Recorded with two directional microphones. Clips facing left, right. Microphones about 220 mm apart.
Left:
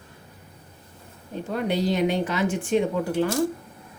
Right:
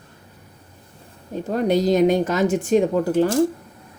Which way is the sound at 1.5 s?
40° right (ahead or behind).